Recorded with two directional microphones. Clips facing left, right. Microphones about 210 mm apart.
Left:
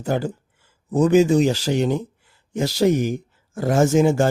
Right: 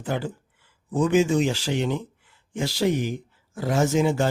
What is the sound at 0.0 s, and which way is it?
Speech, 40° left (ahead or behind).